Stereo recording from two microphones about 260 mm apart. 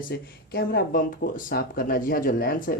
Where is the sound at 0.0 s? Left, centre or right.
Left.